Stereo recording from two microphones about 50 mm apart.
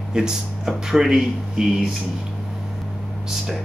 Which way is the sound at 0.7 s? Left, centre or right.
Centre.